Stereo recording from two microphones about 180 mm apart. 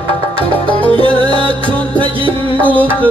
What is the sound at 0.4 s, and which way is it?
Music, 30° right (ahead or behind).